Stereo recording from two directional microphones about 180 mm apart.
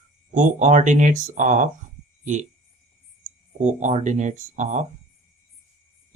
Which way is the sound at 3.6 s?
40° right (ahead or behind).